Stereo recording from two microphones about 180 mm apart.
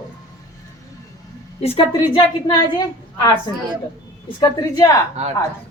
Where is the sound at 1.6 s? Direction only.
35° left (ahead or behind).